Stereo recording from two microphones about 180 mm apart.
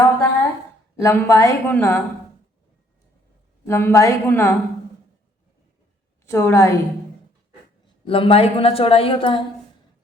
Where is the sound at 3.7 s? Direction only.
15° left (ahead or behind).